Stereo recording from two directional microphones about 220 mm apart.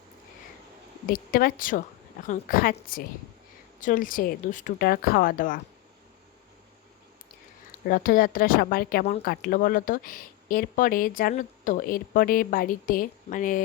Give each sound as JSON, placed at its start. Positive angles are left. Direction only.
{"t": 1.0, "sound": "speech", "side_deg": 40}
{"t": 7.9, "sound": "speech", "side_deg": 40}